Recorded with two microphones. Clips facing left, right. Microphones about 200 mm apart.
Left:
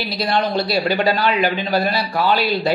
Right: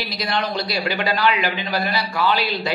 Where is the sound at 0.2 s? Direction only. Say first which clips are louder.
Left 5 dB; 30° left (ahead or behind).